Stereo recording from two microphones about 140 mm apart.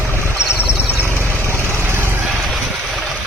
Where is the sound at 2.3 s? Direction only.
Centre (ahead or behind).